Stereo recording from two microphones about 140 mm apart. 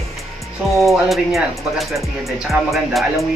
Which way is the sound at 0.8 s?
Centre (ahead or behind).